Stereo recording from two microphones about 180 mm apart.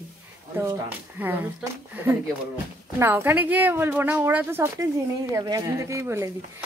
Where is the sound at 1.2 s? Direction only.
10° right (ahead or behind).